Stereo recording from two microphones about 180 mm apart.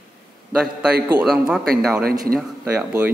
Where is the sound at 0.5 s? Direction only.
5° right (ahead or behind).